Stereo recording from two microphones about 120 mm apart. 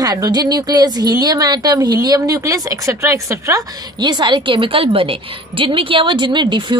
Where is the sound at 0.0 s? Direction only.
30° right (ahead or behind).